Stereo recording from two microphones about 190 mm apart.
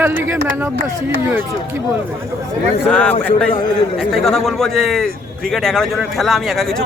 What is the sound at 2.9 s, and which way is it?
A man's voice, 5° left (ahead or behind).